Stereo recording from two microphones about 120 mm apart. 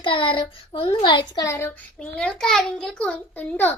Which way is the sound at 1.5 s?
25° left (ahead or behind).